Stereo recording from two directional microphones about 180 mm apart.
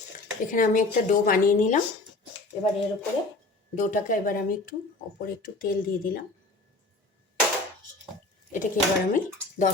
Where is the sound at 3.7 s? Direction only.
45° left (ahead or behind).